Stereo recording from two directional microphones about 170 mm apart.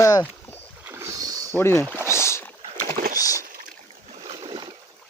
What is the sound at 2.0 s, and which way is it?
Rowboat, 15° left (ahead or behind).